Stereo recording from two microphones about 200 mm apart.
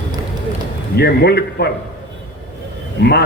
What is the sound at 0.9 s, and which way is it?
Speech, 55° left (ahead or behind).